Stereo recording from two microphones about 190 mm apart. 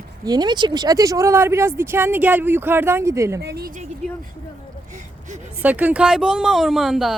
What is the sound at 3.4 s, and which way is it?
Speech, 60° right (ahead or behind).